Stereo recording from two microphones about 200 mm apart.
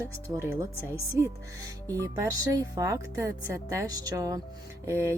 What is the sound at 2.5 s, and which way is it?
A woman's voice, 15° right (ahead or behind).